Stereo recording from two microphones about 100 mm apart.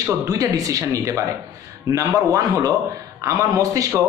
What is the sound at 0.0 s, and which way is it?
Speech, 35° right (ahead or behind).